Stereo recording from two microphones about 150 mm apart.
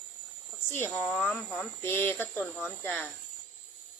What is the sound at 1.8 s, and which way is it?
Speech, 15° left (ahead or behind).